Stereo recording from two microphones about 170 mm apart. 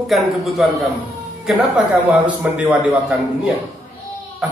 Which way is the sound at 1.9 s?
10° right (ahead or behind).